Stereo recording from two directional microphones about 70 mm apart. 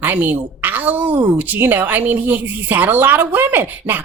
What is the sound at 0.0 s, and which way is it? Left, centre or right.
A woman's voice, right.